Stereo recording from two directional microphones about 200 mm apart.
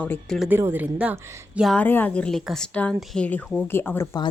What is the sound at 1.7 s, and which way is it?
A woman's voice, 10° left (ahead or behind).